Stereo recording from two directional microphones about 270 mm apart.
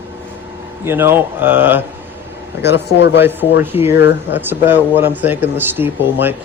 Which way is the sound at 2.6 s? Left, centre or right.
Left.